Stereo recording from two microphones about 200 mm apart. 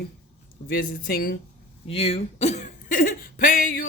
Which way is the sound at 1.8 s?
30° left (ahead or behind).